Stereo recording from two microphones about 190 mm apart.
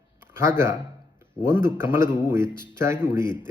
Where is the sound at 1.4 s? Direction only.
15° right (ahead or behind).